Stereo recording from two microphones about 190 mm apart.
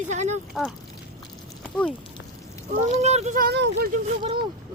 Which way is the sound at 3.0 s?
35° right (ahead or behind).